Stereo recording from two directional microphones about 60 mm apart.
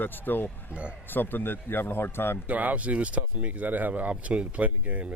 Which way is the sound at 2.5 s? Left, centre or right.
Right.